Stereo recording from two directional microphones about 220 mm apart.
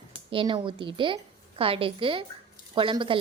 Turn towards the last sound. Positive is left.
turn(degrees=-25)  # may be behind; listen again after turning